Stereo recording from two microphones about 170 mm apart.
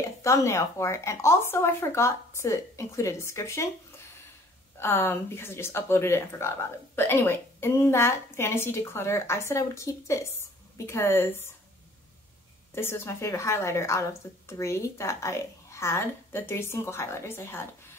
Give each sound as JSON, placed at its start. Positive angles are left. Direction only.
{"t": 0.2, "sound": "speech", "side_deg": 20}
{"t": 4.7, "sound": "speech", "side_deg": 15}
{"t": 12.7, "sound": "speech", "side_deg": 15}